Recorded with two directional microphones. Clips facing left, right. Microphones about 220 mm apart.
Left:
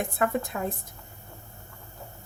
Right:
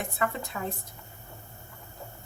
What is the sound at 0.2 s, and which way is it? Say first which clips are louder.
Speech: left 4 dB; 50° left (ahead or behind).